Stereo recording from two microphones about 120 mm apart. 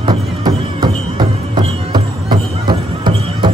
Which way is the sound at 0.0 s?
40° right (ahead or behind).